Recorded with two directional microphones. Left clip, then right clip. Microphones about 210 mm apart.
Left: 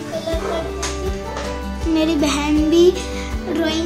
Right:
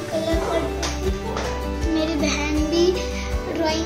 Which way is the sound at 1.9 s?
50° left (ahead or behind).